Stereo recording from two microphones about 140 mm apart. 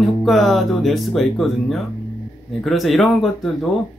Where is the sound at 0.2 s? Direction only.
Centre (ahead or behind).